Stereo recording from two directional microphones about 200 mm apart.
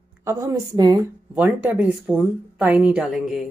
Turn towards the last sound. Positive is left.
turn(degrees=0)  # may be behind; listen again after turning